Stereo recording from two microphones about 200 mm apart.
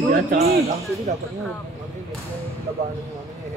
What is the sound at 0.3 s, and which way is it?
Speech, 50° right (ahead or behind).